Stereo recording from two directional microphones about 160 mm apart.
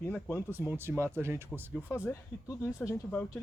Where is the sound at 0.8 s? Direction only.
15° right (ahead or behind).